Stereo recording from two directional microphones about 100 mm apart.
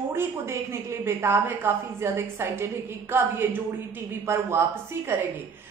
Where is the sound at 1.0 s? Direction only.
25° right (ahead or behind).